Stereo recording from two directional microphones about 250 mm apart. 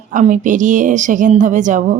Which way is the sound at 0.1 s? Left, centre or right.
Right.